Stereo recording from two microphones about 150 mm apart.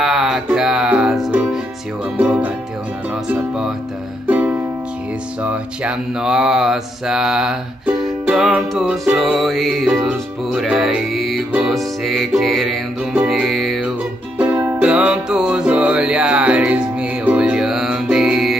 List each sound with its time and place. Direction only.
0.0 s music: centre (ahead or behind)
5.4 s mantra: 10° right (ahead or behind)
14.4 s music: 10° right (ahead or behind)